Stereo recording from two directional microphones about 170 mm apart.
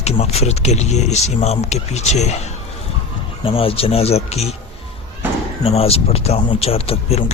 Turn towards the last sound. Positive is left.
turn(degrees=35)  # may be behind; listen again after turning